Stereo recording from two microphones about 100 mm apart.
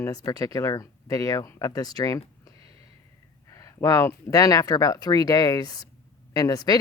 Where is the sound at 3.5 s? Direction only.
35° left (ahead or behind).